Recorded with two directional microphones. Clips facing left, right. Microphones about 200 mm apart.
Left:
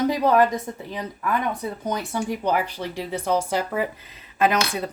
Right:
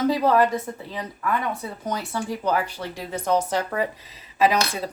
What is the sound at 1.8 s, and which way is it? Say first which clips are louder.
Speech: left 1 dB; 20° left (ahead or behind).